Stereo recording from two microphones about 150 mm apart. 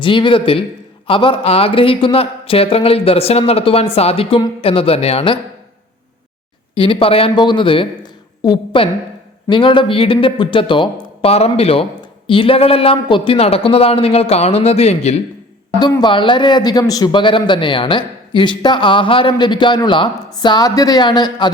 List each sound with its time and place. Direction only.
0.0 s a man's voice: 35° left (ahead or behind)
6.7 s a man's voice: 35° left (ahead or behind)
15.8 s a man's voice: 30° left (ahead or behind)